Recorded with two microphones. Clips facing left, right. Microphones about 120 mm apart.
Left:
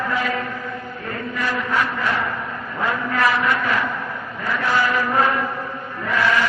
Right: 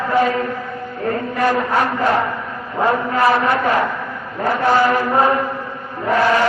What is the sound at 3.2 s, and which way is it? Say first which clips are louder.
Chant: right 4 dB; 35° right (ahead or behind).